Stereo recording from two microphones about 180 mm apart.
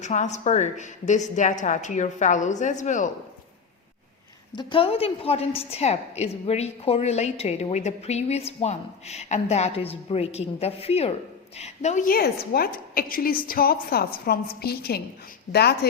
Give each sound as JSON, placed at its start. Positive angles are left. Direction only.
{"t": 0.0, "sound": "a woman's voice", "side_deg": 40}
{"t": 4.5, "sound": "a woman's voice", "side_deg": 30}